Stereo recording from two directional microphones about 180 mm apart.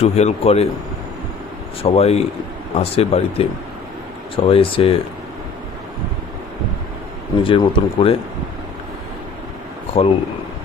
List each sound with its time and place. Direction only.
0.0 s a man's voice: 35° left (ahead or behind)
1.8 s a man's voice: 35° left (ahead or behind)
4.4 s a man's voice: 30° left (ahead or behind)
7.4 s speech: 30° left (ahead or behind)
10.0 s a man's voice: 30° left (ahead or behind)